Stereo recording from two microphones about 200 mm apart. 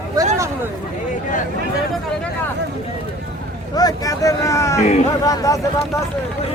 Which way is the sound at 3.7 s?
20° left (ahead or behind).